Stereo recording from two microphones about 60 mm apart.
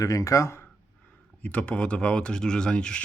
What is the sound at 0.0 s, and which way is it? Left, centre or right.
Speech, left.